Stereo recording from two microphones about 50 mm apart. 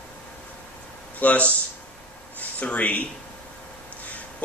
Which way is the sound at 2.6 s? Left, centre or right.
Left.